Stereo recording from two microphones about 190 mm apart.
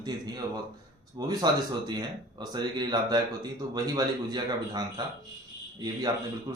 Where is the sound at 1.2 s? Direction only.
20° right (ahead or behind).